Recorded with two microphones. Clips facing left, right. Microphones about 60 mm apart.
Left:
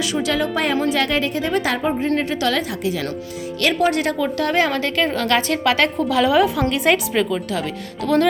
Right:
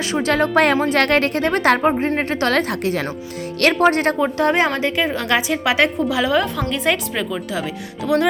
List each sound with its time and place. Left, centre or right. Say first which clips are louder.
0.1 s a woman's voice: right 8 dB; right
4.2 s a woman's voice: right 2 dB; right
6.1 s a woman's voice: left 2 dB; centre